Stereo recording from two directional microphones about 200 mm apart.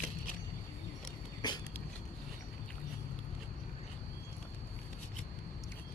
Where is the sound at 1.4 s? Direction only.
20° left (ahead or behind).